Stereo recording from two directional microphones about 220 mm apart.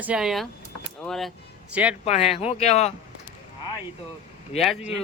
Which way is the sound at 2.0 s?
30° left (ahead or behind).